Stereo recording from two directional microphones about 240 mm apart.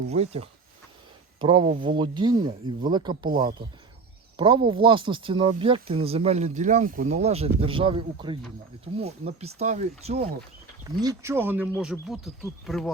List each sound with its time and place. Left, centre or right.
0.1 s speech: right
3.2 s speech: right
4.4 s speech: right
11.0 s speech: centre